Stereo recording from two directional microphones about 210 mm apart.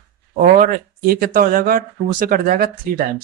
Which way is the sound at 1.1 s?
40° right (ahead or behind).